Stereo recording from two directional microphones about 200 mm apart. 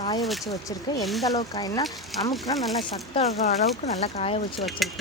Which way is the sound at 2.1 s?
Centre (ahead or behind).